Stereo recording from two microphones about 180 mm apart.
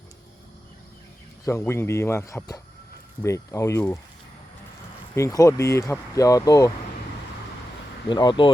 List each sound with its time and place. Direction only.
1.5 s speech: 15° left (ahead or behind)
5.1 s speech: 20° left (ahead or behind)
8.1 s speech: 25° left (ahead or behind)